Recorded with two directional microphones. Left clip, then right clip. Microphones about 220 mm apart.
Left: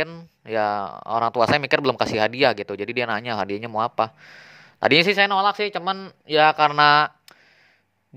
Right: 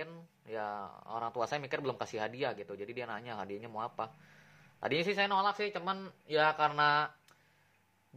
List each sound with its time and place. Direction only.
0.0 s speech: 45° left (ahead or behind)